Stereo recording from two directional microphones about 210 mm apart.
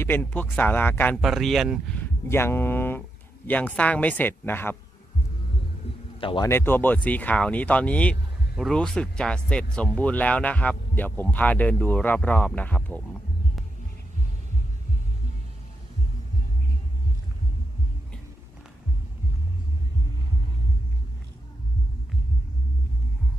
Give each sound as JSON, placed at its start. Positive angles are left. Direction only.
{"t": 0.0, "sound": "speech", "side_deg": 10}
{"t": 6.2, "sound": "speech", "side_deg": 20}
{"t": 6.5, "sound": "speech", "side_deg": 10}